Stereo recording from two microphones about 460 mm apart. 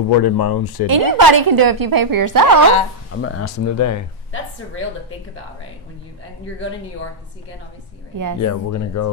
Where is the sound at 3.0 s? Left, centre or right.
Left.